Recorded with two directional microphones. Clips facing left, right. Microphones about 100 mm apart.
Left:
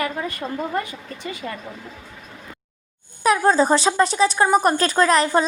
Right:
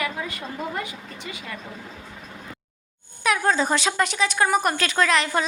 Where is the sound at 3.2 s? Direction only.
35° left (ahead or behind).